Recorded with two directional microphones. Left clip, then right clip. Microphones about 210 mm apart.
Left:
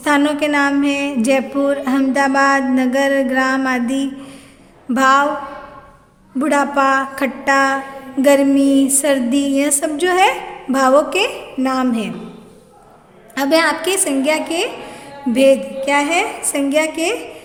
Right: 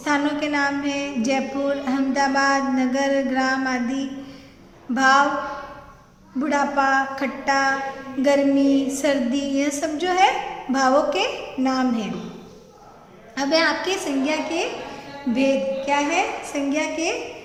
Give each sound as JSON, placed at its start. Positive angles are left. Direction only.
{"t": 0.0, "sound": "a woman's voice", "side_deg": 40}
{"t": 6.4, "sound": "a woman's voice", "side_deg": 50}
{"t": 13.3, "sound": "a woman's voice", "side_deg": 50}